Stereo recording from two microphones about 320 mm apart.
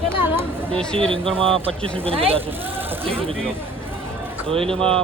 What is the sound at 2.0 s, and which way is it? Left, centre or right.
Speech, centre.